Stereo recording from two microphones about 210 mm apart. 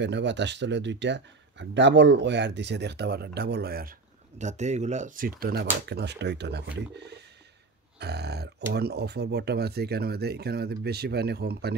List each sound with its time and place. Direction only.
0.0 s speech: 55° right (ahead or behind)
4.4 s speech: 35° right (ahead or behind); by 6.7 s 55° right (ahead or behind)
8.0 s speech: 50° right (ahead or behind)